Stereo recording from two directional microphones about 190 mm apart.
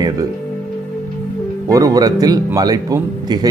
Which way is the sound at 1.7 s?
20° right (ahead or behind).